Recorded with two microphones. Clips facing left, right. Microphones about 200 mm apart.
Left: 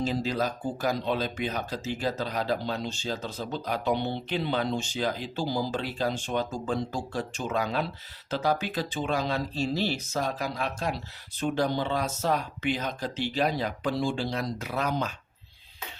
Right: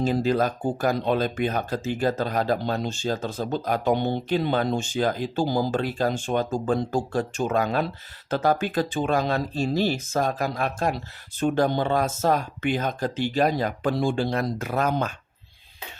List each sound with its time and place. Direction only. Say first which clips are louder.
0.0 s speech: right 6 dB; 55° right (ahead or behind)